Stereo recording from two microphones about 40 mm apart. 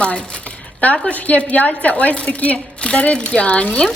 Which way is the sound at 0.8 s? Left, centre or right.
Left.